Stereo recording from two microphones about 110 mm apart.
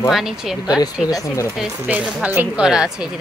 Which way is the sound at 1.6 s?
10° right (ahead or behind).